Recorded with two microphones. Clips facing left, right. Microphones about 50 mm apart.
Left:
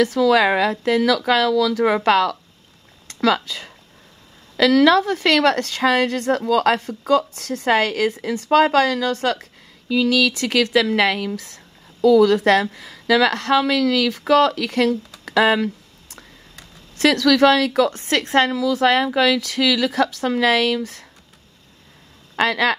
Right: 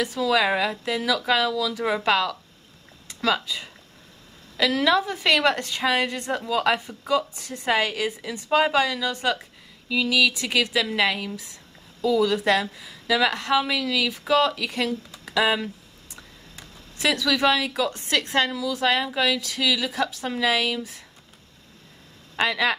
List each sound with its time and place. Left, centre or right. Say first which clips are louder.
0.0 s a woman's voice: left 7 dB; left
1.1 s a woman's voice: left 5 dB; left
4.6 s a woman's voice: left 7 dB; left
15.2 s speech: left 6 dB; left
16.9 s a woman's voice: left 7 dB; left
17.8 s a woman's voice: left 4 dB; left
22.3 s speech: left 4 dB; left